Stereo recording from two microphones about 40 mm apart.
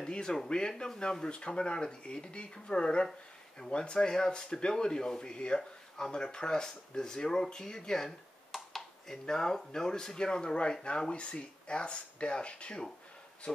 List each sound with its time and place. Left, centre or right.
0.0 s speech: centre